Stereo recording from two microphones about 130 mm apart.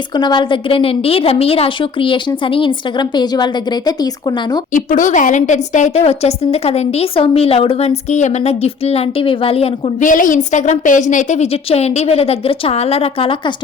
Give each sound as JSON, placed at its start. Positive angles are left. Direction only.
{"t": 0.1, "sound": "a woman's voice", "side_deg": 35}
{"t": 4.7, "sound": "a woman's voice", "side_deg": 85}
{"t": 10.0, "sound": "a woman's voice", "side_deg": 90}